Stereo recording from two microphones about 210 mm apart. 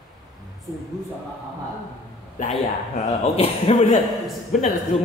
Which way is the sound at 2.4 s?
35° left (ahead or behind).